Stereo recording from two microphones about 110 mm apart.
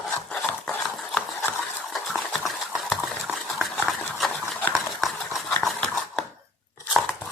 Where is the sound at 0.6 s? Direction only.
5° left (ahead or behind).